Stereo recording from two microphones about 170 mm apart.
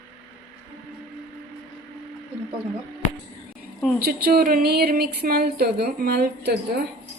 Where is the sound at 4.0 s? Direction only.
65° right (ahead or behind).